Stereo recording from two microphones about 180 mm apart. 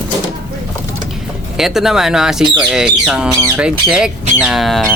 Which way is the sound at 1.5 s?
Centre (ahead or behind).